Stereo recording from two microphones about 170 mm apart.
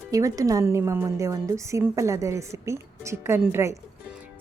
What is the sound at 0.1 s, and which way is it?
A woman's voice, 20° right (ahead or behind).